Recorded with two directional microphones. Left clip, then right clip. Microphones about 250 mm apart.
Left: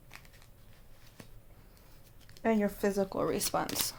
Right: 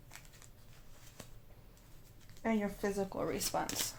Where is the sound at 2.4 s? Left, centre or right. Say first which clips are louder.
Left 6 dB; left.